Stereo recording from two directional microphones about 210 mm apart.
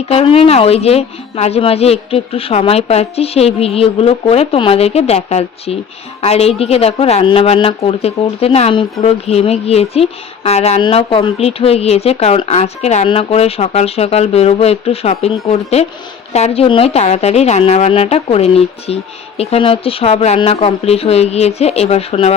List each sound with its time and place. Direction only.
0.0 s speech: 30° left (ahead or behind)